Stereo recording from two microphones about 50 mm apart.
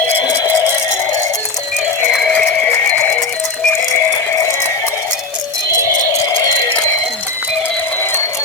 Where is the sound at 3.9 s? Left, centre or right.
Left.